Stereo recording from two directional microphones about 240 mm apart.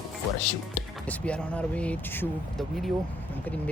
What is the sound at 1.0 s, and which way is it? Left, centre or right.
Speech, centre.